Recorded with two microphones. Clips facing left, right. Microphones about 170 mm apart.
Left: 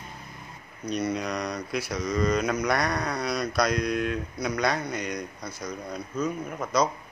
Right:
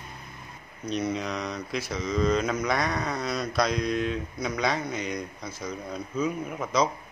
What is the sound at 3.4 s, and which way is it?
Speech, centre (ahead or behind).